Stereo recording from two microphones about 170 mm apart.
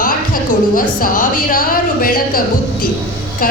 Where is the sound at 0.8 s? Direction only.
55° left (ahead or behind).